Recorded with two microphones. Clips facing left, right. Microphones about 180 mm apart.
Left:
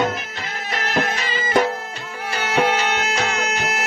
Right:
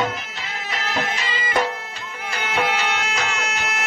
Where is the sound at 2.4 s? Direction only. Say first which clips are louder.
Left 4 dB; 40° left (ahead or behind).